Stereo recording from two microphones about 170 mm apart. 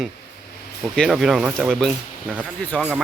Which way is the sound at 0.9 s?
Centre (ahead or behind).